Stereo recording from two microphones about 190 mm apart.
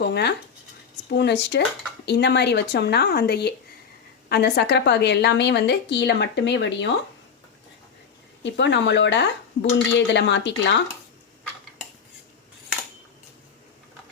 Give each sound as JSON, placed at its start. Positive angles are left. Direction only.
{"t": 0.0, "sound": "a woman's voice", "side_deg": 60}
{"t": 8.4, "sound": "speech", "side_deg": 70}